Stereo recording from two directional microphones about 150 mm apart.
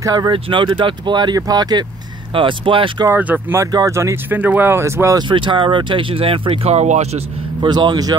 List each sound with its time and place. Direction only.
0.0 s speech: 20° right (ahead or behind)
0.3 s speech: 35° right (ahead or behind)
3.1 s speech: 10° right (ahead or behind)
5.3 s speech: 35° right (ahead or behind)
7.6 s speech: 30° right (ahead or behind)